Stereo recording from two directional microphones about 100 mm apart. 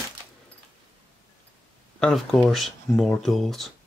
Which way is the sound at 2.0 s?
5° left (ahead or behind).